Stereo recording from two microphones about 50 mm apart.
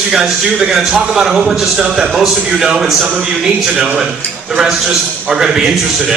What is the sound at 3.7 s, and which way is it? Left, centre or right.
Speech, right.